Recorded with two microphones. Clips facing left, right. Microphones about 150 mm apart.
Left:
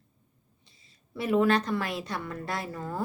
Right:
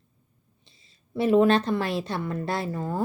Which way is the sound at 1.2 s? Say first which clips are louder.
Right 5 dB; 25° right (ahead or behind).